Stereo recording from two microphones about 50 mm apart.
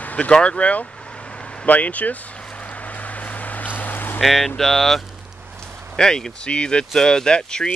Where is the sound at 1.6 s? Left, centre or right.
Left.